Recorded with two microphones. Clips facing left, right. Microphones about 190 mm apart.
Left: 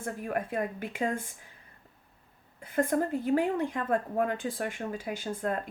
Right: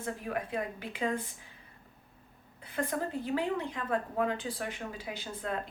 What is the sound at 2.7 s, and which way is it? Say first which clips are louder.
A woman's voice: left 6 dB; 50° left (ahead or behind).